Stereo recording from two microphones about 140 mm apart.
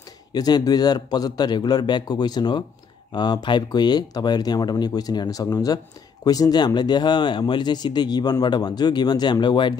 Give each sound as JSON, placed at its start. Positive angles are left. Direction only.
{"t": 0.3, "sound": "speech", "side_deg": 30}